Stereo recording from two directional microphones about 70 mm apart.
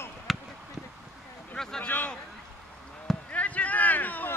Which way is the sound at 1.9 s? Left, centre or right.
Left.